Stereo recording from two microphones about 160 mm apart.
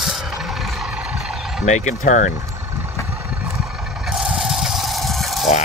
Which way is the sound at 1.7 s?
50° left (ahead or behind).